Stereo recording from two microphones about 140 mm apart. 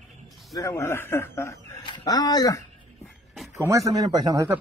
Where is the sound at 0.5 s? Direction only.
20° left (ahead or behind).